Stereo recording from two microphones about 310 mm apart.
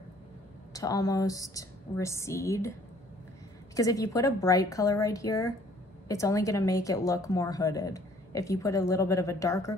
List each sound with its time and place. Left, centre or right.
0.7 s a woman's voice: centre
3.7 s a woman's voice: centre